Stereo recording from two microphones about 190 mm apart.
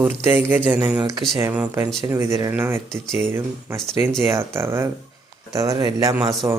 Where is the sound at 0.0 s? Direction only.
10° right (ahead or behind).